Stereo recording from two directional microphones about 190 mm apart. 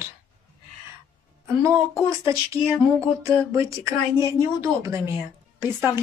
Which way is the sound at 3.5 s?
15° right (ahead or behind).